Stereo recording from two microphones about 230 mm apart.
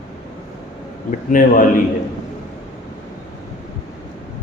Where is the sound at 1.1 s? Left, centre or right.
Left.